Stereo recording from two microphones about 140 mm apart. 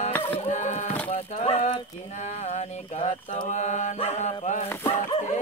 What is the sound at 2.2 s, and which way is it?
Mantra, 55° left (ahead or behind).